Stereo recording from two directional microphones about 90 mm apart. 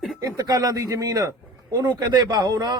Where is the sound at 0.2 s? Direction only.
45° right (ahead or behind).